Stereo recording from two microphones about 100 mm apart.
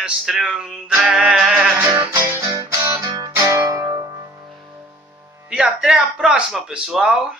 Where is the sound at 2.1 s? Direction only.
30° right (ahead or behind).